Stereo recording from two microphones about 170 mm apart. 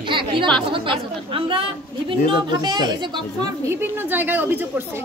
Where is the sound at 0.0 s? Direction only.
30° right (ahead or behind).